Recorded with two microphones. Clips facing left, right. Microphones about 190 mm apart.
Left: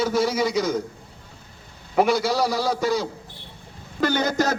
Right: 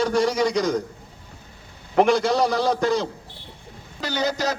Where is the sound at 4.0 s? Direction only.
50° left (ahead or behind).